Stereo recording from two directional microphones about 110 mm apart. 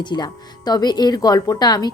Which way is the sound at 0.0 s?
40° left (ahead or behind).